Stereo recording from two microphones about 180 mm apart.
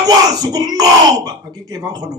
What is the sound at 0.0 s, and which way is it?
Speech, 20° right (ahead or behind).